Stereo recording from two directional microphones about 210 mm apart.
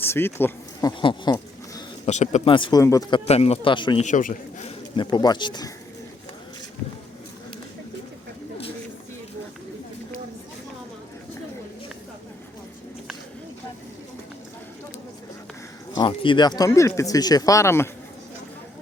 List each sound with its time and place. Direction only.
0.0 s speech: 10° left (ahead or behind)
2.0 s speech: 35° left (ahead or behind); by 3.2 s 15° left (ahead or behind)
3.2 s speech: 30° left (ahead or behind)
4.0 s a man's voice: 40° left (ahead or behind)
4.9 s speech: 20° left (ahead or behind)
16.0 s speech: 25° left (ahead or behind)